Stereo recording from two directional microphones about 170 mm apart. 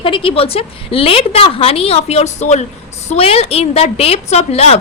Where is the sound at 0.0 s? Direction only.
30° left (ahead or behind).